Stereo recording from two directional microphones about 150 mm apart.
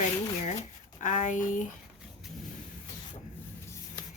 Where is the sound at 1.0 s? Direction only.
55° left (ahead or behind).